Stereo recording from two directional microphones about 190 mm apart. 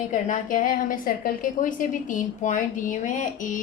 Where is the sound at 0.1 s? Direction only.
45° left (ahead or behind).